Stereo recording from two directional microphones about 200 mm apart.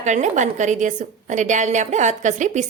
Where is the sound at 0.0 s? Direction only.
35° right (ahead or behind).